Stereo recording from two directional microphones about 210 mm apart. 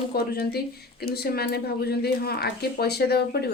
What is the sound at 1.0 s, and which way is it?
Speech, 50° left (ahead or behind).